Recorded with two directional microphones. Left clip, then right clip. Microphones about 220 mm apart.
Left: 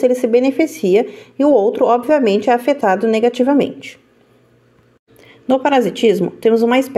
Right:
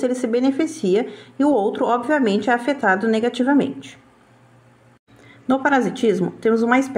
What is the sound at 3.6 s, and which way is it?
Speech, 55° left (ahead or behind).